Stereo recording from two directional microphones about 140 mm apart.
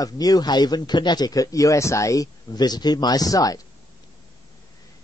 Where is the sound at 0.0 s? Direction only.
25° left (ahead or behind).